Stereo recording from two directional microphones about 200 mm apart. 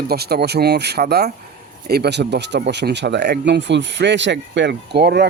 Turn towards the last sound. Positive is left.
turn(degrees=-55)  # may be behind; listen again after turning